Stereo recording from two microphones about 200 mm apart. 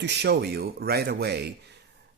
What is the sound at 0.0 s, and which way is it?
Speech, 55° right (ahead or behind).